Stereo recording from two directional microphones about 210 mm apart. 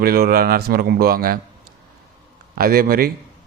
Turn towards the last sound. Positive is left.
turn(degrees=-45)  # may be behind; listen again after turning